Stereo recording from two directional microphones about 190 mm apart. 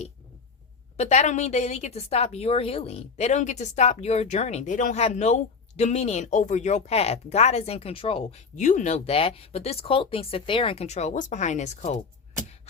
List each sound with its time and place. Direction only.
0.9 s a woman's voice: 35° left (ahead or behind)